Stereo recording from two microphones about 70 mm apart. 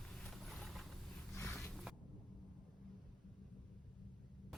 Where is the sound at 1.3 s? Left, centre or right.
Left.